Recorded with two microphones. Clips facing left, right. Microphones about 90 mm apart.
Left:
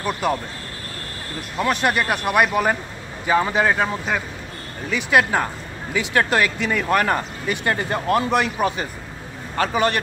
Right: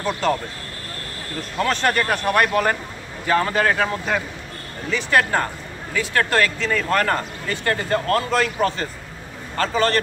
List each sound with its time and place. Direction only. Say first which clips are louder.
0.0 s speech: right 1 dB; 10° left (ahead or behind)
1.6 s speech: even; 10° left (ahead or behind)